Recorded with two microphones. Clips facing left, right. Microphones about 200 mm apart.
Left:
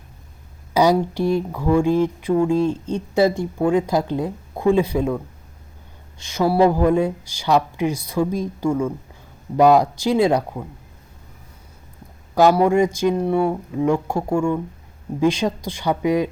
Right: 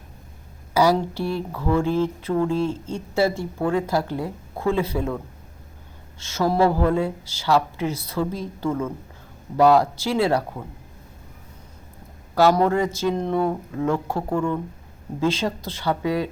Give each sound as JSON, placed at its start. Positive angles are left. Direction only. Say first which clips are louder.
{"t": 0.7, "sound": "speech", "louder": "left 2 dB", "side_deg": 20}
{"t": 12.3, "sound": "speech", "louder": "left 3 dB", "side_deg": 15}